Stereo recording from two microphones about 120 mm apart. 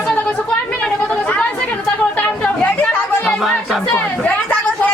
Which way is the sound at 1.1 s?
5° left (ahead or behind).